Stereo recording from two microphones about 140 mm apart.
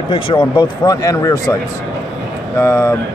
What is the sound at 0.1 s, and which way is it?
Speech, 35° left (ahead or behind).